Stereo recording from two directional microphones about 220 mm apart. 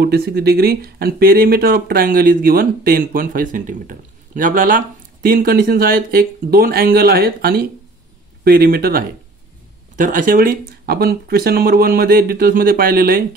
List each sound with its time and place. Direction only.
0.0 s speech: 45° right (ahead or behind)